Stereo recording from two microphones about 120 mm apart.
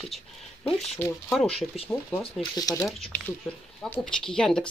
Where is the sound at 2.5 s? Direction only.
30° left (ahead or behind).